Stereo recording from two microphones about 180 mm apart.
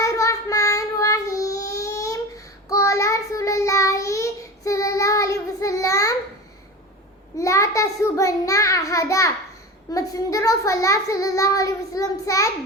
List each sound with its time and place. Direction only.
0.0 s child singing: 15° left (ahead or behind)
7.3 s child singing: 15° left (ahead or behind)
9.9 s a child's voice: 20° left (ahead or behind)